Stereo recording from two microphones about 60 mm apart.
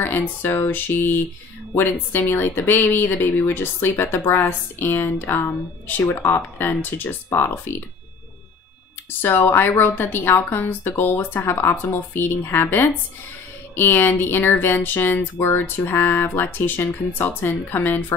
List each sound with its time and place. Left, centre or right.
0.0 s a woman's voice: left
9.2 s a woman's voice: left